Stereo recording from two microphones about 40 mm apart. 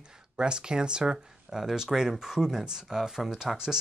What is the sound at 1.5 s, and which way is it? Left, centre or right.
Speech, centre.